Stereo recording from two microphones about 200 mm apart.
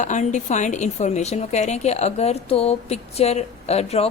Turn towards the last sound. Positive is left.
turn(degrees=30)  # may be behind; listen again after turning